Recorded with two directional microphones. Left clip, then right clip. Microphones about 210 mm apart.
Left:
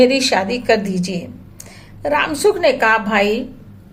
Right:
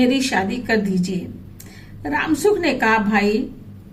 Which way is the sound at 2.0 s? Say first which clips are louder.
Left 4 dB; 30° left (ahead or behind).